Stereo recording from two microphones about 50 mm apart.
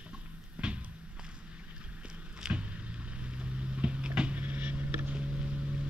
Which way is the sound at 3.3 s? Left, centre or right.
Right.